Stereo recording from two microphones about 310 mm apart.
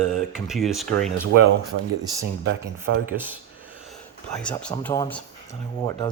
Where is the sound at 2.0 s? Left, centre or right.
Centre.